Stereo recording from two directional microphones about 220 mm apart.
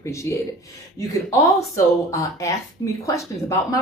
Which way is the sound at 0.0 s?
15° left (ahead or behind).